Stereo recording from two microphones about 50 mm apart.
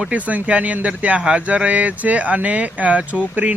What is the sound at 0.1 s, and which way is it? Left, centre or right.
Speech, right.